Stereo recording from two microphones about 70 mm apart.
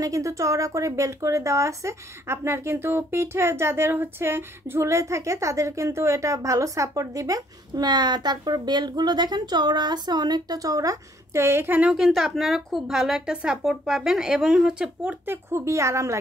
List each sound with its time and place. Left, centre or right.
0.0 s speech: right
11.3 s a woman's voice: right
11.8 s a woman's voice: centre
15.2 s a woman's voice: right
15.6 s speech: right